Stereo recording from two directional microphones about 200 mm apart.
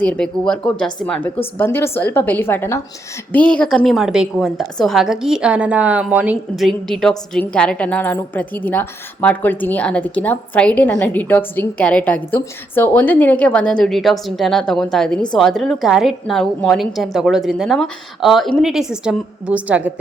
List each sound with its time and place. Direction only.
0.0 s a woman's voice: 5° left (ahead or behind)